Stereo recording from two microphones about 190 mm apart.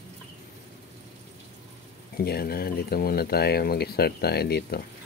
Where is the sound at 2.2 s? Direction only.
55° left (ahead or behind).